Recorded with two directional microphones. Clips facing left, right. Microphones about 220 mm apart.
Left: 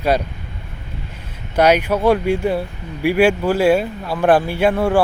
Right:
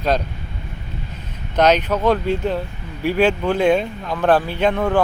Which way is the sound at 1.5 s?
10° left (ahead or behind).